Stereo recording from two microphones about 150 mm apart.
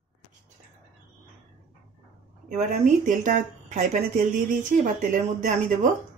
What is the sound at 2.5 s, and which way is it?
Speech, 55° right (ahead or behind).